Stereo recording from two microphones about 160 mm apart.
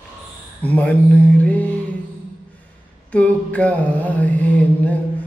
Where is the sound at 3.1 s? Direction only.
10° left (ahead or behind).